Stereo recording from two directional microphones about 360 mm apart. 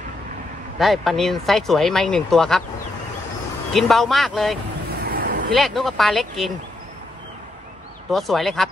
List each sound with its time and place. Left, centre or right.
0.7 s speech: centre
3.7 s speech: centre
5.0 s a sound: right
5.5 s speech: centre
8.1 s speech: centre